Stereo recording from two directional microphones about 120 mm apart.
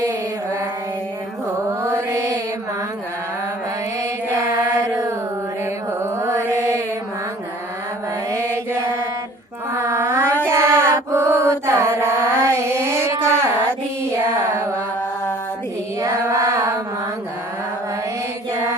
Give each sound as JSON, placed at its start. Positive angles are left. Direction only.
{"t": 1.8, "sound": "mantra", "side_deg": -25}
{"t": 4.8, "sound": "mantra", "side_deg": -25}
{"t": 6.1, "sound": "mantra", "side_deg": -25}
{"t": 8.3, "sound": "mantra", "side_deg": -25}
{"t": 16.0, "sound": "child singing", "side_deg": -30}